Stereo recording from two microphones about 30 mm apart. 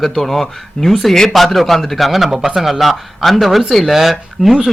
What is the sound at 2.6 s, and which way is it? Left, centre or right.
A man's voice, centre.